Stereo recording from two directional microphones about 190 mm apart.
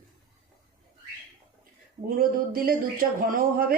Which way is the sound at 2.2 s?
50° right (ahead or behind).